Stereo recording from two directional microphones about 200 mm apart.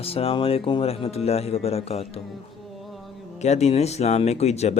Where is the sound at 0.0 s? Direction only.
30° left (ahead or behind).